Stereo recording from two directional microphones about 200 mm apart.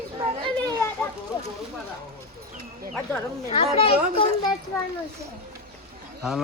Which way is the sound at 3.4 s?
30° left (ahead or behind).